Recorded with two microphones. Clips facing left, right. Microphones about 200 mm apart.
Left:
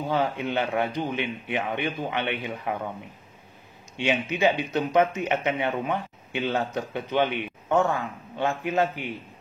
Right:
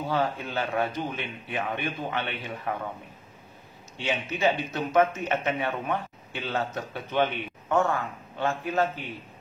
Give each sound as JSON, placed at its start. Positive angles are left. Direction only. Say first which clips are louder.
{"t": 0.1, "sound": "a man's voice", "louder": "left 3 dB", "side_deg": 20}
{"t": 3.9, "sound": "a man's voice", "louder": "left 4 dB", "side_deg": 15}